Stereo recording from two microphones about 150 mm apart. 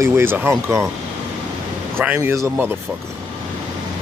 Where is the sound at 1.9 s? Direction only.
15° right (ahead or behind).